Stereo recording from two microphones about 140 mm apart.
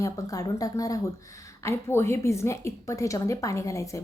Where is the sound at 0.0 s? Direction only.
25° left (ahead or behind).